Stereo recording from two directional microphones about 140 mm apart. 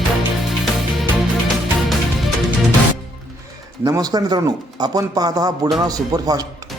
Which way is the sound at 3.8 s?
25° right (ahead or behind).